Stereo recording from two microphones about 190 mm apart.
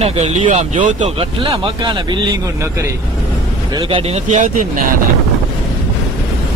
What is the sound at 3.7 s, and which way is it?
Speech, 25° right (ahead or behind).